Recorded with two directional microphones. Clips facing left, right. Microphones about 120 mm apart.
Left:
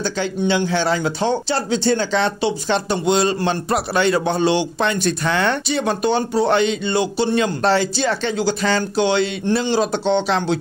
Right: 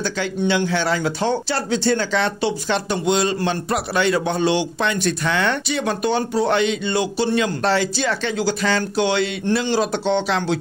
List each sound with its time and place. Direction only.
0.4 s speech: 25° left (ahead or behind)